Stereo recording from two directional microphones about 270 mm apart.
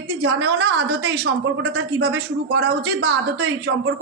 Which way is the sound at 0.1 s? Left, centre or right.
Right.